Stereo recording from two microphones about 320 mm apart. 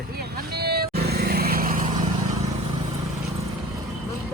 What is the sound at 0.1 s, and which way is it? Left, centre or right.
Vehicle, right.